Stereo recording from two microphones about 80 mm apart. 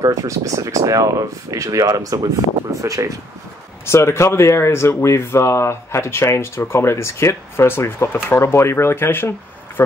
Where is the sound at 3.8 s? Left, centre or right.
Left.